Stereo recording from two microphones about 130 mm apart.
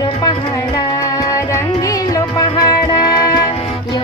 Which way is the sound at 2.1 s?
30° left (ahead or behind).